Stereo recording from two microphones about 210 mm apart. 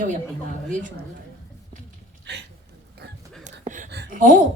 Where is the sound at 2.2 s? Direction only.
55° right (ahead or behind).